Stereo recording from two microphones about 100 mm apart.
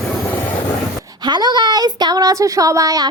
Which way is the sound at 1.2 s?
45° right (ahead or behind).